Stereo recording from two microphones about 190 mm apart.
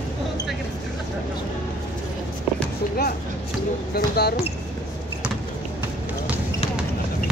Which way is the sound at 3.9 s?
55° left (ahead or behind).